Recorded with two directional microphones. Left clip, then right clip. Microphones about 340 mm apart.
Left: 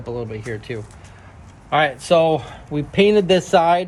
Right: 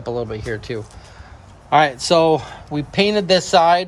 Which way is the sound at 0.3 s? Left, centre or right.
Right.